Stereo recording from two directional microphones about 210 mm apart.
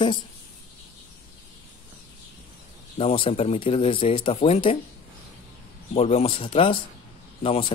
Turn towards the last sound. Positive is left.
turn(degrees=25)  # may be behind; listen again after turning